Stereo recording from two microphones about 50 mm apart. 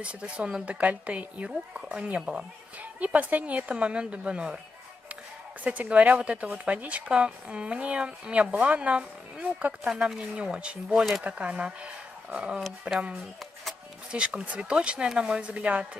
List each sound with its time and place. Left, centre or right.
0.0 s a woman's voice: right
5.6 s a woman's voice: right
9.8 s speech: centre
11.2 s a woman's voice: right
14.1 s a woman's voice: right